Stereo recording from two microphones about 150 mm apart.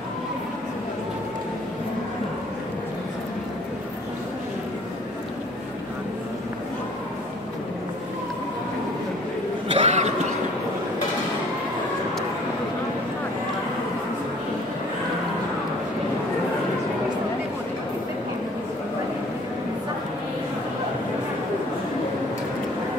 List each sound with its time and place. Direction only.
9.7 s cough: 45° right (ahead or behind)